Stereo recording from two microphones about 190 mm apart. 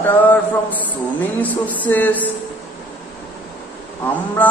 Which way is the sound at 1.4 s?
10° left (ahead or behind).